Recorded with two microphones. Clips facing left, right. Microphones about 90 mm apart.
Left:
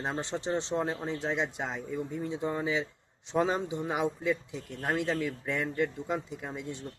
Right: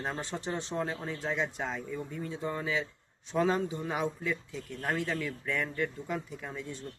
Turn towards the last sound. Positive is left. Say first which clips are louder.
# left 2 dB
turn(degrees=20)  # may be behind; listen again after turning